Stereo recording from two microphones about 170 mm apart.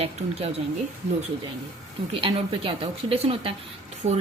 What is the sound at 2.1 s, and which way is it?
A woman's voice, 30° right (ahead or behind).